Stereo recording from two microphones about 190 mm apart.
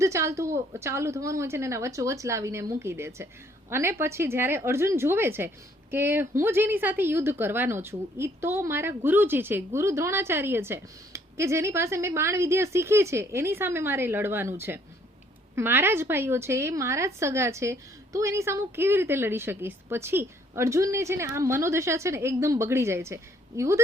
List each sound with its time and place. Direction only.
0.0 s speech: 15° right (ahead or behind)